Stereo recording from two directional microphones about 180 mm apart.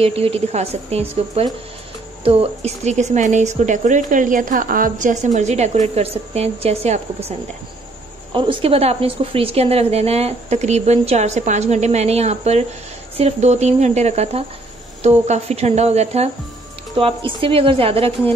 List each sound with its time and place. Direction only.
0.0 s speech: 35° right (ahead or behind)
17.4 s speech: 30° right (ahead or behind)